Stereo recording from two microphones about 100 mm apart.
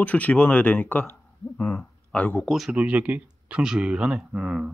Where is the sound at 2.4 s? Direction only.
Centre (ahead or behind).